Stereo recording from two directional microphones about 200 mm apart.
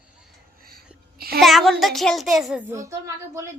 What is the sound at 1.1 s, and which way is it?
Speech, 50° right (ahead or behind).